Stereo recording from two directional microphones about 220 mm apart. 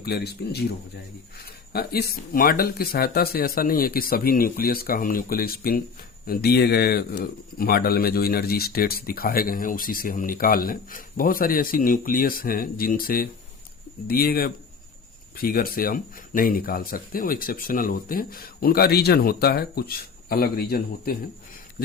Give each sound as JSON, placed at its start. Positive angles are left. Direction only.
{"t": 0.0, "sound": "a man's voice", "side_deg": 45}